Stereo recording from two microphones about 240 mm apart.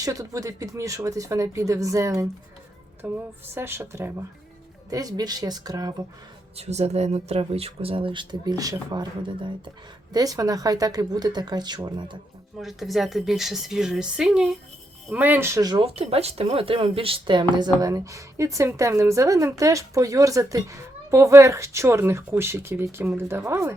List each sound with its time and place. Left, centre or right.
0.0 s a woman's voice: centre
6.6 s a woman's voice: right
12.5 s a woman's voice: centre